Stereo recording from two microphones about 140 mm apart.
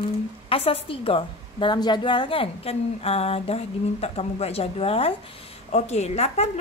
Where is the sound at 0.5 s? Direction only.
45° left (ahead or behind).